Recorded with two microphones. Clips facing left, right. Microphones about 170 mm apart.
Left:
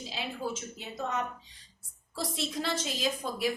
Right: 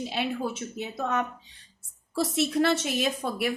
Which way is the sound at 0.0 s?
65° right (ahead or behind).